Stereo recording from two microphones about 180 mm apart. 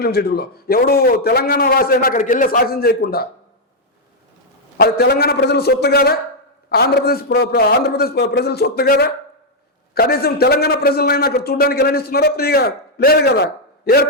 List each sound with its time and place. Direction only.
0.0 s a man's voice: 60° left (ahead or behind)
4.8 s a man's voice: 60° left (ahead or behind)